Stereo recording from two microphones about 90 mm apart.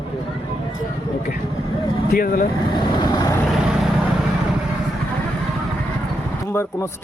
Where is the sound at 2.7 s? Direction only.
60° left (ahead or behind).